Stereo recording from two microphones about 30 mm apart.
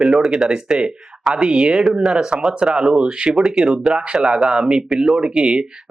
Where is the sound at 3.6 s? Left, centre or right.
Centre.